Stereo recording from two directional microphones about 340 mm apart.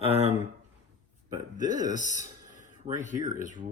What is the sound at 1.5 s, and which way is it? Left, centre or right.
Speech, left.